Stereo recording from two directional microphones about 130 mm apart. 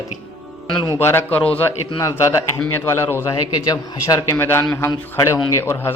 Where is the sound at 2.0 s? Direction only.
25° left (ahead or behind).